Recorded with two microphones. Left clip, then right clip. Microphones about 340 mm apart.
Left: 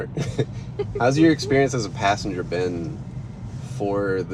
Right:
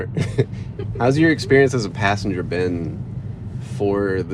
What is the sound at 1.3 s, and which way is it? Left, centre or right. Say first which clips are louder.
Speech: right 5 dB; right.